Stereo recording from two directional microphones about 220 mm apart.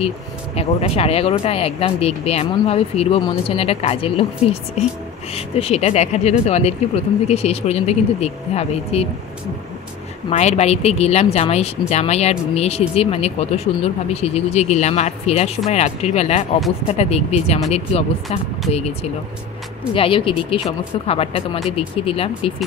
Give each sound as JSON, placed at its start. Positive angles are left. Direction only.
{"t": 0.6, "sound": "speech", "side_deg": 25}
{"t": 10.3, "sound": "speech", "side_deg": 30}